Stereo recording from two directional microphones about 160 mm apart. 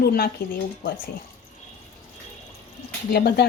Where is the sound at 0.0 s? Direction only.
70° left (ahead or behind).